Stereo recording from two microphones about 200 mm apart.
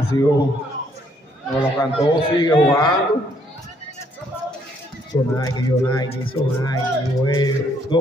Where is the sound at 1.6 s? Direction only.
20° left (ahead or behind).